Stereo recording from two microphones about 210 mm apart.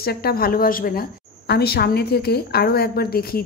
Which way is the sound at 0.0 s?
45° left (ahead or behind).